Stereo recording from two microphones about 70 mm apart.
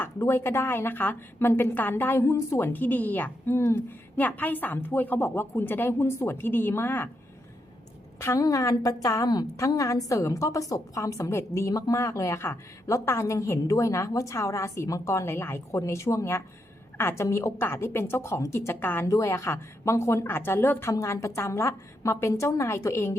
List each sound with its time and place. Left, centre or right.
0.0 s a woman's voice: left
3.5 s a woman's voice: left
4.2 s a woman's voice: left
8.4 s a woman's voice: left
9.6 s a woman's voice: left
11.7 s a woman's voice: left
17.2 s a woman's voice: left
18.7 s a woman's voice: left
19.0 s a woman's voice: left
21.0 s a woman's voice: left